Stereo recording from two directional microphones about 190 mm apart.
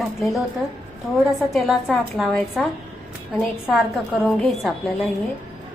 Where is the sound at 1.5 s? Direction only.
Centre (ahead or behind).